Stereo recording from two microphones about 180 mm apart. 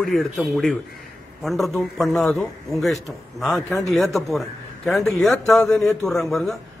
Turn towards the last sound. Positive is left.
turn(degrees=0)  # may be behind; listen again after turning